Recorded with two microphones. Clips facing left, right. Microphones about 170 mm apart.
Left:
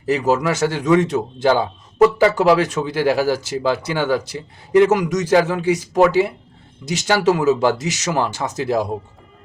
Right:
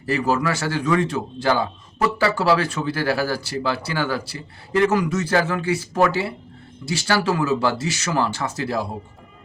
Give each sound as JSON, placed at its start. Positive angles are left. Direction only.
{"t": 0.0, "sound": "a man's voice", "side_deg": 20}